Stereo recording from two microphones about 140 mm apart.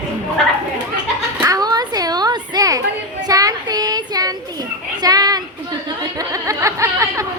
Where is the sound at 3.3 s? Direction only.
25° right (ahead or behind).